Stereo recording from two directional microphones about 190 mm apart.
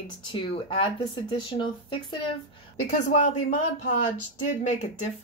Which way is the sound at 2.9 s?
40° left (ahead or behind).